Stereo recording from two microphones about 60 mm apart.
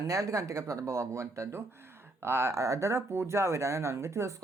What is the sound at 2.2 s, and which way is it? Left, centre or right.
Speech, right.